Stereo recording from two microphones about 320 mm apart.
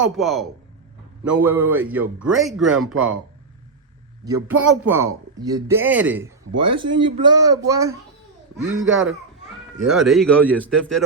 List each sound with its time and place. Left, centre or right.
0.2 s speech: centre
4.4 s speech: centre
8.6 s a child's voice: right
9.8 s speech: centre